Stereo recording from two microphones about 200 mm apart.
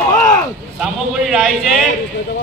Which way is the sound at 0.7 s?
5° right (ahead or behind).